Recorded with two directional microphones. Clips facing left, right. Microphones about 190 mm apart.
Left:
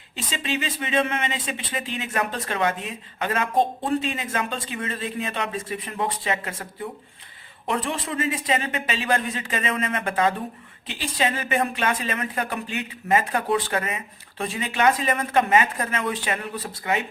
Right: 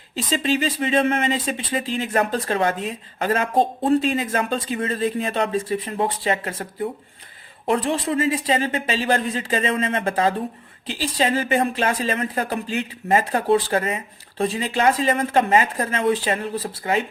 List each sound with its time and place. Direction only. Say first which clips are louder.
0.3 s speech: right 7 dB; 35° right (ahead or behind)
7.7 s speech: right 6 dB; 35° right (ahead or behind)